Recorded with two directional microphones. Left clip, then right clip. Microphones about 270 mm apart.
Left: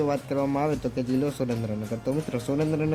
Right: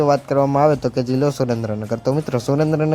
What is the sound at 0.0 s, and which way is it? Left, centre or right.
A man's voice, centre.